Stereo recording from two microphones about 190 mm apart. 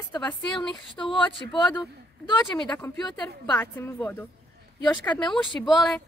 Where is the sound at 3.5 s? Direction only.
10° left (ahead or behind).